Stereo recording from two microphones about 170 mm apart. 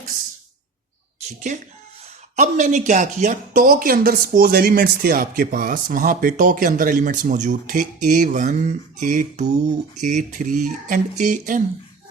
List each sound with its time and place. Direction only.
2.3 s speech: 45° right (ahead or behind)